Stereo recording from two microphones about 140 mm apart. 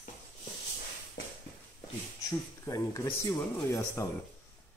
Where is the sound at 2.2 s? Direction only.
25° left (ahead or behind).